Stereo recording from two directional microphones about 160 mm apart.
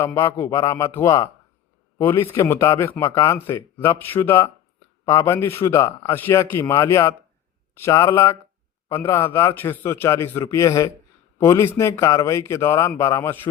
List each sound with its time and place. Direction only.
0.0 s speech: 15° left (ahead or behind)